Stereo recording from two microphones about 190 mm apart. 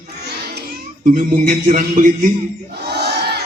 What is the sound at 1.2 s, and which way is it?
A man's voice, 45° right (ahead or behind).